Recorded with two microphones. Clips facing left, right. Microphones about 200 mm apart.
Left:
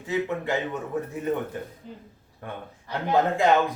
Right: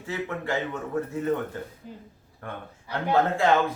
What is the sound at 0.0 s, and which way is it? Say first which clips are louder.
A man's voice: left 4 dB; 20° left (ahead or behind).